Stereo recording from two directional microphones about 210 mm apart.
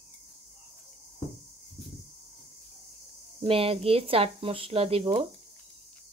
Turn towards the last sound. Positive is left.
turn(degrees=-25)  # may be behind; listen again after turning